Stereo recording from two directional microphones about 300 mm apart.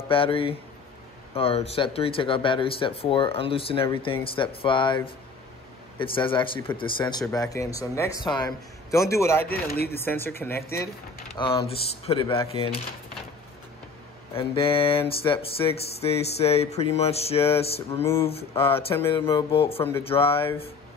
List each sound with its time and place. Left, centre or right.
0.1 s speech: centre
9.5 s speech: left
9.9 s speech: centre
14.3 s speech: centre
18.0 s speech: centre